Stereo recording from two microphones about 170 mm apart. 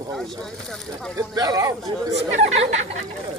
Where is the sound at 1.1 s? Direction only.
20° right (ahead or behind).